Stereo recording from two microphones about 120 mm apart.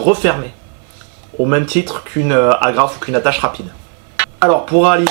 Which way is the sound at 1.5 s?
15° right (ahead or behind).